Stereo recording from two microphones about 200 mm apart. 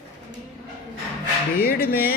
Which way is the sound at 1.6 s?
50° left (ahead or behind).